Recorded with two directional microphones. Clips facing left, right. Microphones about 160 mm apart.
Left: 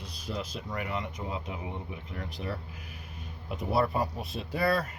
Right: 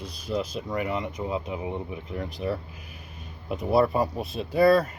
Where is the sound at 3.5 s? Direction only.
20° right (ahead or behind).